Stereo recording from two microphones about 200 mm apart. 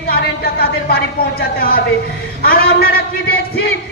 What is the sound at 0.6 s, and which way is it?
A man's voice, 50° left (ahead or behind).